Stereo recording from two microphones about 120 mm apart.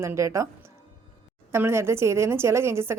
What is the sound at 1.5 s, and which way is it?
Speech, 20° right (ahead or behind).